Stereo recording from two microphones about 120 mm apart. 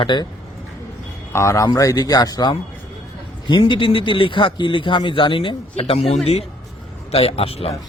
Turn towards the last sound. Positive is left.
turn(degrees=55)  # may be behind; listen again after turning